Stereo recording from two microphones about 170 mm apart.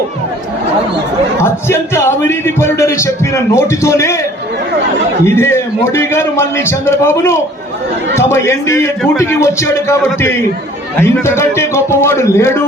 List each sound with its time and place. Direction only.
1.4 s a man's voice: 15° left (ahead or behind)
5.2 s a man's voice: 15° left (ahead or behind)